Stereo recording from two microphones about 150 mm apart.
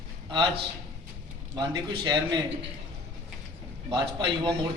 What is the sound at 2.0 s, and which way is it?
Speech, 25° right (ahead or behind).